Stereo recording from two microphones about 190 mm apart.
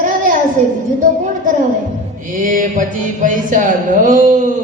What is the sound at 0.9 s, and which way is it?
A man's voice, 45° right (ahead or behind).